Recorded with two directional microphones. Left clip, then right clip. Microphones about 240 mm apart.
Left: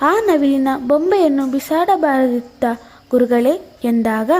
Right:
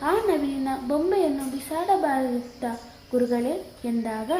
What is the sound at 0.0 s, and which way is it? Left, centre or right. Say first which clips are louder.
A woman's voice: left 9 dB; left.